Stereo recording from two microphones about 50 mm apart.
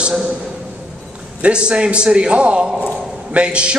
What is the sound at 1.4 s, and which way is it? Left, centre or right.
A man's voice, right.